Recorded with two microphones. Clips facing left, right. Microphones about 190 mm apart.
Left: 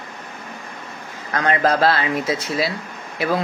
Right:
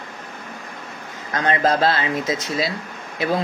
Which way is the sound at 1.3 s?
25° right (ahead or behind).